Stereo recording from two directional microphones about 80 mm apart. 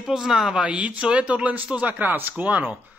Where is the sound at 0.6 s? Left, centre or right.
Centre.